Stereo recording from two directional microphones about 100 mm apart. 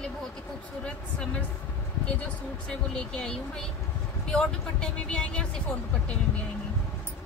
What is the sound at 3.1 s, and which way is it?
A woman's voice, 10° left (ahead or behind).